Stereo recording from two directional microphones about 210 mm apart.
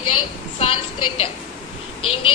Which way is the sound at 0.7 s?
25° left (ahead or behind).